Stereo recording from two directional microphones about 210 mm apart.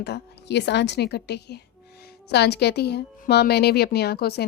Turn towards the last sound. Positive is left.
turn(degrees=50)  # may be behind; listen again after turning